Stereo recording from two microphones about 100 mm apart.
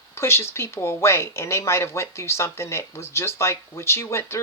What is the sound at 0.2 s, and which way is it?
Speech, 25° left (ahead or behind).